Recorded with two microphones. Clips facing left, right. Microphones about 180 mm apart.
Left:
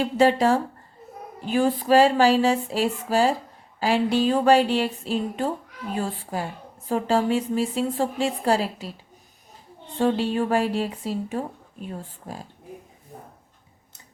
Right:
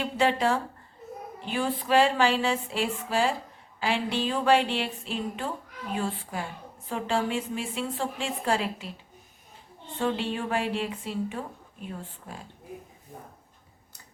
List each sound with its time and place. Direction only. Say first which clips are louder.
0.0 s a woman's voice: left 6 dB; 40° left (ahead or behind)
10.0 s a woman's voice: left 6 dB; 40° left (ahead or behind)